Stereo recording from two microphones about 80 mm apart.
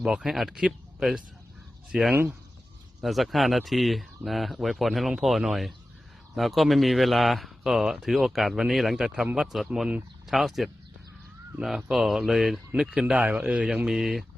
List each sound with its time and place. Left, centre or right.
0.0 s speech: centre